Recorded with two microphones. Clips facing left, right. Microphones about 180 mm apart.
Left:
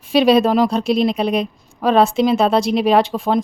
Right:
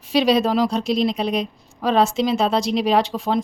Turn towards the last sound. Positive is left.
turn(degrees=55)  # may be behind; listen again after turning